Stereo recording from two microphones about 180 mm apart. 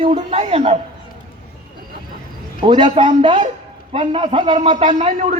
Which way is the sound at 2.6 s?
25° right (ahead or behind).